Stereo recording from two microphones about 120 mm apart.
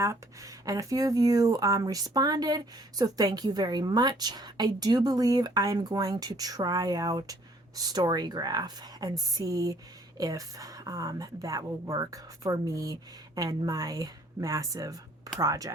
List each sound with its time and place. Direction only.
0.0 s a woman's voice: 25° right (ahead or behind)